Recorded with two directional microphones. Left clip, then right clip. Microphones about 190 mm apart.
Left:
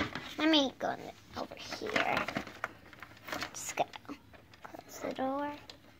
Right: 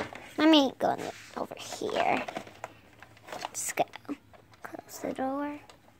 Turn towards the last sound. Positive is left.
turn(degrees=-40)  # may be behind; listen again after turning